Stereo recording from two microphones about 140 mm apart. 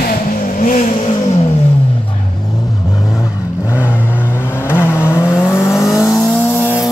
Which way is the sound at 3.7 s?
15° left (ahead or behind).